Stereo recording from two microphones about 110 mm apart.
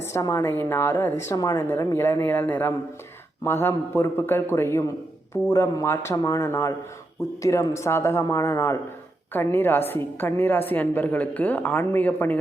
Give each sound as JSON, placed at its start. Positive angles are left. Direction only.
{"t": 0.1, "sound": "a woman's voice", "side_deg": 25}